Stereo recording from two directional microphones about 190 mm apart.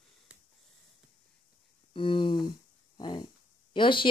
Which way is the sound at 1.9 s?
25° left (ahead or behind).